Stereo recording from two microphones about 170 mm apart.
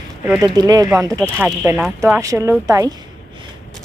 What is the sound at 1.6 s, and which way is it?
Speech, 5° right (ahead or behind).